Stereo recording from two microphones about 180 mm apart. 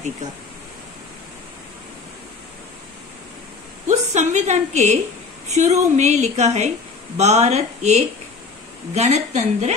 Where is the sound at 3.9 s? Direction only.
40° right (ahead or behind).